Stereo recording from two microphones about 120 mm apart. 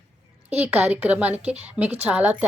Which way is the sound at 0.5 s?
15° right (ahead or behind).